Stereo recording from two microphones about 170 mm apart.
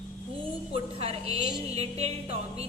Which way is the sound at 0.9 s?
35° right (ahead or behind).